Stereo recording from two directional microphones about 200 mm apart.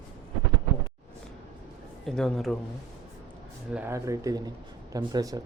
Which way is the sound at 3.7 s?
10° right (ahead or behind).